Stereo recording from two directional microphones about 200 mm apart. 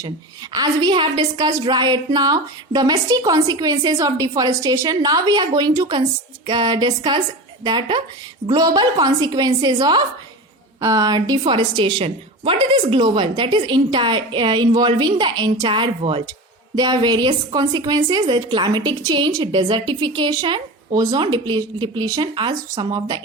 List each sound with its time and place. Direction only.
0.5 s a woman's voice: 20° right (ahead or behind)